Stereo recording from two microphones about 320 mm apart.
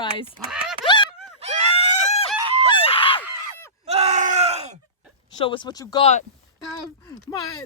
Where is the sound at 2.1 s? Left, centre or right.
Centre.